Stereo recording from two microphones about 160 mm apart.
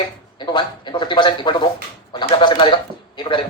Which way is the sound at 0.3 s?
30° left (ahead or behind).